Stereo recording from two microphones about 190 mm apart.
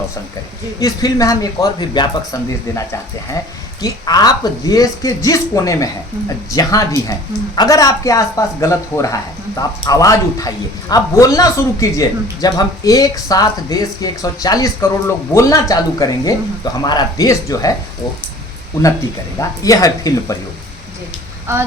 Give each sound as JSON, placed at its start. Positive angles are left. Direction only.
{"t": 0.8, "sound": "a man's voice", "side_deg": 20}
{"t": 19.4, "sound": "a man's voice", "side_deg": 20}
{"t": 21.5, "sound": "speech", "side_deg": -15}